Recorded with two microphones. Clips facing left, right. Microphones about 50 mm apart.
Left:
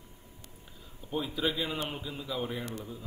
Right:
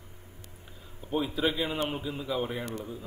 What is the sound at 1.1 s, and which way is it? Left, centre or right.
Speech, centre.